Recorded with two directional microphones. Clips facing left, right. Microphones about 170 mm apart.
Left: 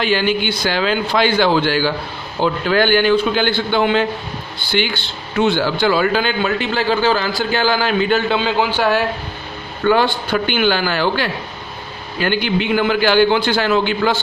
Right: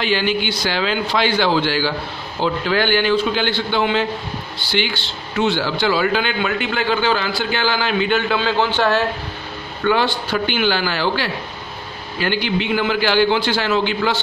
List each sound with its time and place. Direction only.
0.0 s a man's voice: 50° left (ahead or behind)
8.4 s a man's voice: 10° left (ahead or behind)
9.8 s a man's voice: 50° left (ahead or behind)